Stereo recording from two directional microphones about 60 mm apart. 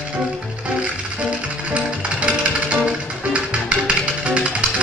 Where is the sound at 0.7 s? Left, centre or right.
Right.